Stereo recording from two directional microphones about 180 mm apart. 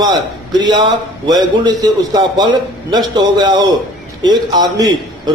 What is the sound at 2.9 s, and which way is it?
A man's voice, 25° right (ahead or behind).